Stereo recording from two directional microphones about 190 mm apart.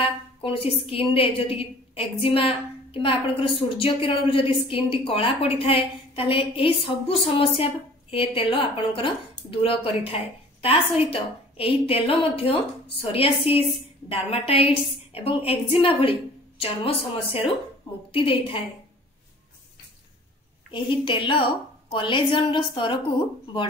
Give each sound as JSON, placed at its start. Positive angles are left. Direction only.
{"t": 0.0, "sound": "a woman's voice", "side_deg": 30}
{"t": 20.7, "sound": "a woman's voice", "side_deg": 25}